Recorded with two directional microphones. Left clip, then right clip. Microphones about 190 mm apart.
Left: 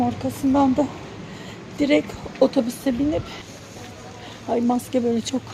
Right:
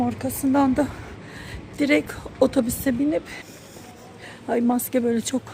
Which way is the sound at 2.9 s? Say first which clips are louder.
Even; 50° right (ahead or behind).